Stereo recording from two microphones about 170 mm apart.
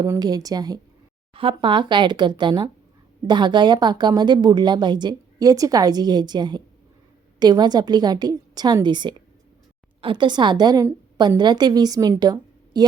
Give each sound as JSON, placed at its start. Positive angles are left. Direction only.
{"t": 0.0, "sound": "a woman's voice", "side_deg": -25}